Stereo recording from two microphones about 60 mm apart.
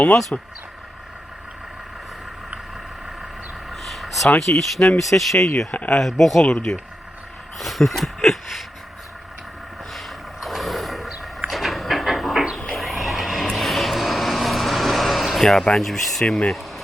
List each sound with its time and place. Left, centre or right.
0.3 s speech: centre
3.7 s vehicle: centre
4.4 s speech: centre
6.4 s speech: centre
7.6 s a sound: centre
10.4 s vehicle: centre
11.4 s a sound: centre
12.5 s vehicle: centre
15.6 s speech: centre